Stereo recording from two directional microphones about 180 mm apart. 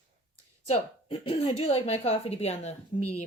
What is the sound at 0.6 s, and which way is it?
Speech, 35° left (ahead or behind).